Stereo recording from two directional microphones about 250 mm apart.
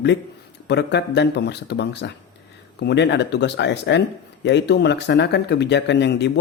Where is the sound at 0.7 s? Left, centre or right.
Left.